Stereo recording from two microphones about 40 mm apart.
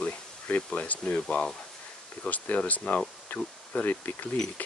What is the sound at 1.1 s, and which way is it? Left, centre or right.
Speech, left.